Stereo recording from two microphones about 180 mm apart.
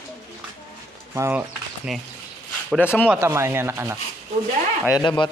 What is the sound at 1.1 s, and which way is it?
Speech, 10° right (ahead or behind).